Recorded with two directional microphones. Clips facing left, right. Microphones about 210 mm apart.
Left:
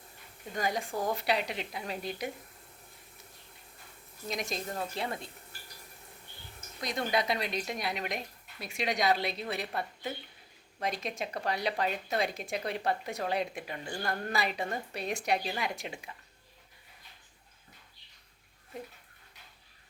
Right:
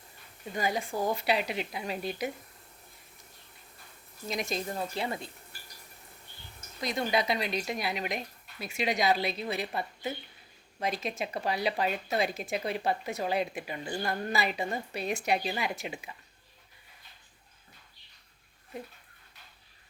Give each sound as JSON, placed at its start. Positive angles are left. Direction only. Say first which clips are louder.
{"t": 0.5, "sound": "speech", "louder": "right 1 dB", "side_deg": -5}
{"t": 4.3, "sound": "speech", "louder": "right 3 dB", "side_deg": 0}
{"t": 6.8, "sound": "speech", "louder": "right 2 dB", "side_deg": 0}
{"t": 13.8, "sound": "speech", "louder": "right 4 dB", "side_deg": -15}
{"t": 14.1, "sound": "speech", "louder": "right 1 dB", "side_deg": 0}